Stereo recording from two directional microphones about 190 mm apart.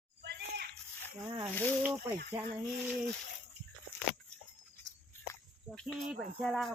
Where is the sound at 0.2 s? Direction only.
60° right (ahead or behind).